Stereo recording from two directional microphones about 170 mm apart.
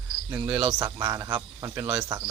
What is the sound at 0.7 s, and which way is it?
Speech, 15° right (ahead or behind).